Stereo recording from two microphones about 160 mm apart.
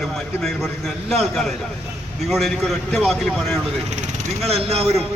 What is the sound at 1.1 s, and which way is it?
A man's voice, centre (ahead or behind).